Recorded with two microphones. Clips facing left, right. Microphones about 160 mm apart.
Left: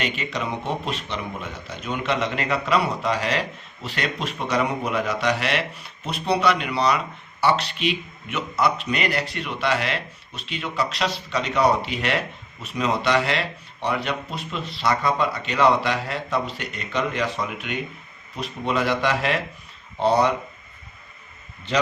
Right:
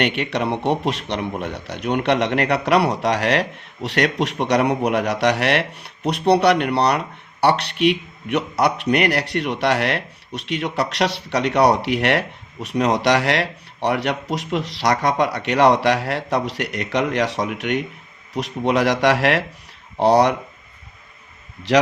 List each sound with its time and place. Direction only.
0.0 s speech: 65° right (ahead or behind)
21.7 s a man's voice: 85° right